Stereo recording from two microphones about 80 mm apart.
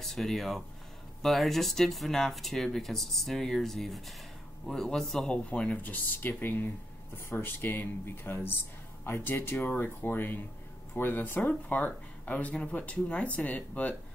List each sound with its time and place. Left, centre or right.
0.0 s speech: centre